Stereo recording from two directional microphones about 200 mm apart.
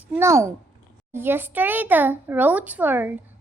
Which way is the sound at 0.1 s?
15° right (ahead or behind).